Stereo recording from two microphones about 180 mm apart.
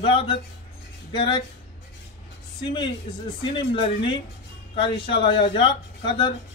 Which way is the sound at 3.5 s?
30° left (ahead or behind).